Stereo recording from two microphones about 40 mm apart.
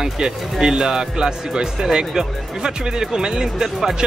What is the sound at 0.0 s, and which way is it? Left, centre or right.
Speech, centre.